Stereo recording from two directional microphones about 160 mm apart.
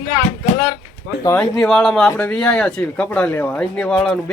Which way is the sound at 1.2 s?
20° left (ahead or behind).